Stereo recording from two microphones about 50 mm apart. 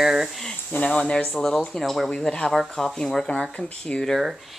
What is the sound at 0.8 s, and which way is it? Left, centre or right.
Speech, centre.